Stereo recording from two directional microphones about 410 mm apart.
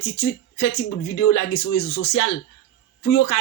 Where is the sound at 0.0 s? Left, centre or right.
Left.